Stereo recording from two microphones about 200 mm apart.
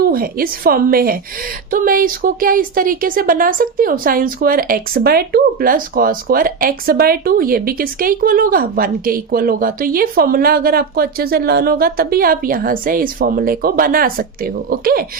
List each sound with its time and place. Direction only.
0.0 s a woman's voice: 50° right (ahead or behind)